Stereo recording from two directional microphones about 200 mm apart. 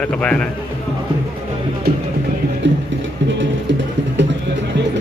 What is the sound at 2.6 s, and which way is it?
Music, 65° right (ahead or behind).